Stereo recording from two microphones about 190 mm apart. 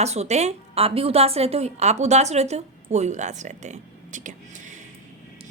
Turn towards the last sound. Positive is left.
turn(degrees=-40)  # may be behind; listen again after turning